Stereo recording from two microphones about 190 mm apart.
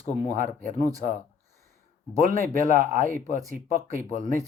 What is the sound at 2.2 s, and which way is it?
Speech, 45° right (ahead or behind).